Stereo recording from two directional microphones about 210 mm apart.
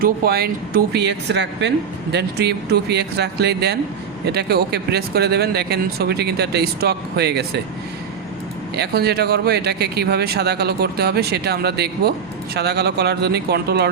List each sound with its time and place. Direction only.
0.0 s speech: 45° right (ahead or behind)
8.7 s speech: 50° right (ahead or behind)